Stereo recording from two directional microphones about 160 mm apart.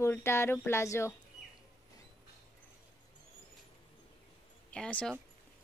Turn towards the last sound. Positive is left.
turn(degrees=5)  # may be behind; listen again after turning